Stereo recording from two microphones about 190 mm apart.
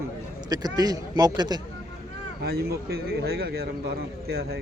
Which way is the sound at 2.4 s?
55° right (ahead or behind).